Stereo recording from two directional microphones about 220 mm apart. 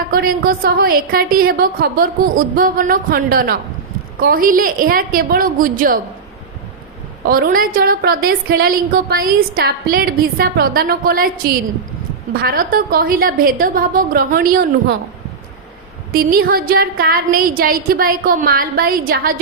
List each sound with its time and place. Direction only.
0.1 s a woman's voice: 40° right (ahead or behind)
7.3 s a woman's voice: 40° right (ahead or behind)
16.1 s a woman's voice: 40° right (ahead or behind)